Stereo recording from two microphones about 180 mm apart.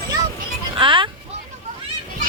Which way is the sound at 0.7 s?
25° right (ahead or behind).